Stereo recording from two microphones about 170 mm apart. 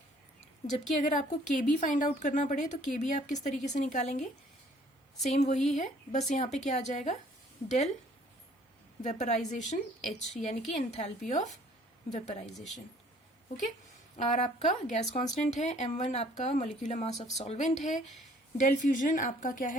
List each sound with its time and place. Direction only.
0.7 s a woman's voice: 45° left (ahead or behind)
9.0 s a woman's voice: 45° left (ahead or behind)
14.2 s speech: 40° left (ahead or behind)